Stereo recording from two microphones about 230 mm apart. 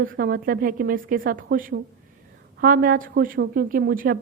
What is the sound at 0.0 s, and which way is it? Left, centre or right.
A woman's voice, right.